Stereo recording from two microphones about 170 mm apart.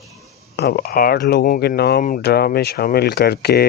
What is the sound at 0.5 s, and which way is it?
Speech, 70° left (ahead or behind).